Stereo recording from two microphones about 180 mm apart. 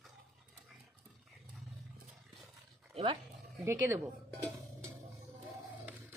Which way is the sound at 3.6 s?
15° right (ahead or behind).